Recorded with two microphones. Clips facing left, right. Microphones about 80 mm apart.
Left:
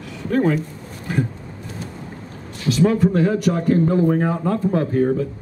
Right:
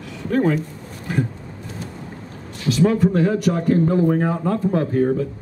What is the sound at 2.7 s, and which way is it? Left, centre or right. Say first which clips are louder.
Speech: even; centre.